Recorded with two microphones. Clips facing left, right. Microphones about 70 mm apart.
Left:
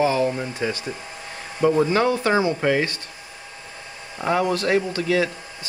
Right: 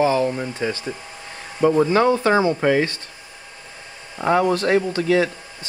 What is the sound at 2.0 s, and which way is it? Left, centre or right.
Speech, right.